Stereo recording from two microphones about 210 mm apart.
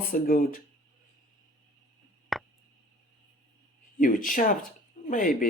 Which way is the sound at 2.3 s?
Centre (ahead or behind).